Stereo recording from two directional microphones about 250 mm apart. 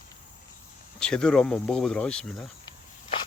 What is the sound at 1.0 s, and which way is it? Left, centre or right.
Speech, centre.